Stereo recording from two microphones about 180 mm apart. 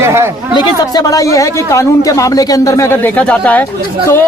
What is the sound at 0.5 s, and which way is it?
Speech, 20° left (ahead or behind).